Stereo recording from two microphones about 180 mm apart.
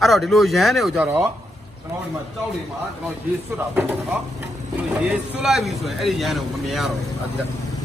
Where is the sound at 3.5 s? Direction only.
10° right (ahead or behind).